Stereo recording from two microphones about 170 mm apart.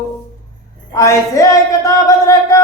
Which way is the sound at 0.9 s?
20° left (ahead or behind).